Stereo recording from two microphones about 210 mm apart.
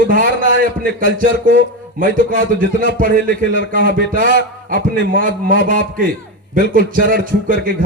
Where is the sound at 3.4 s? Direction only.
55° left (ahead or behind).